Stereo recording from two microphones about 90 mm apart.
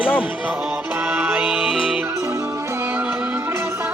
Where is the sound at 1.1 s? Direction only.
20° right (ahead or behind).